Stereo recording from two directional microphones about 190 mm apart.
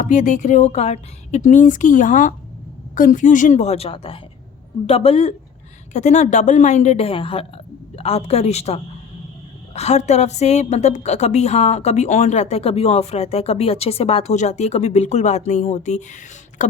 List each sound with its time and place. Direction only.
0.0 s a woman's voice: 40° left (ahead or behind)
16.6 s beatboxing: 40° left (ahead or behind)